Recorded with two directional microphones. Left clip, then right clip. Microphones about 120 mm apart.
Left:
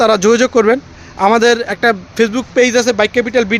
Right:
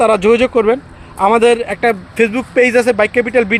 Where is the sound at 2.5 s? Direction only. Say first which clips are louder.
Right 1 dB; 15° left (ahead or behind).